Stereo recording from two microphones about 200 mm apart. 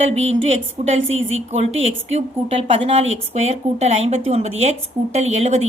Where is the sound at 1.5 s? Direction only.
30° right (ahead or behind).